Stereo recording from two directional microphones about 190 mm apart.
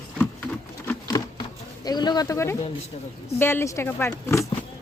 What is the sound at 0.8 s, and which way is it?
Insect, 15° left (ahead or behind).